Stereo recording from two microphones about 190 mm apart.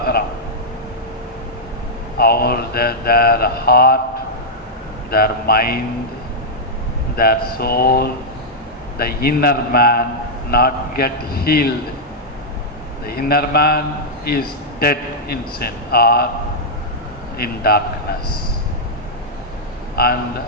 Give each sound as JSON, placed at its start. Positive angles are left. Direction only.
{"t": 0.0, "sound": "a sound", "side_deg": 55}
{"t": 2.1, "sound": "a sound", "side_deg": 55}
{"t": 5.1, "sound": "a man's voice", "side_deg": 55}
{"t": 7.2, "sound": "a man's voice", "side_deg": 55}
{"t": 13.1, "sound": "a man's voice", "side_deg": 55}
{"t": 17.3, "sound": "a man's voice", "side_deg": 55}
{"t": 20.0, "sound": "a man's voice", "side_deg": 55}